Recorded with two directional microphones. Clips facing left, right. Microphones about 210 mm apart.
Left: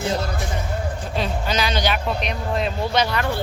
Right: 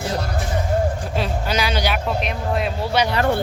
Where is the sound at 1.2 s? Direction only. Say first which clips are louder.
Even; 10° right (ahead or behind).